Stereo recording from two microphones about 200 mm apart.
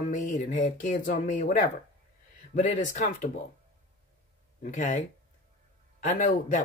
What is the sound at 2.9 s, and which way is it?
Speech, 40° left (ahead or behind).